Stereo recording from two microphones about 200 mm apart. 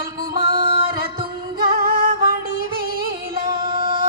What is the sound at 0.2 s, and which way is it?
Music, 45° right (ahead or behind).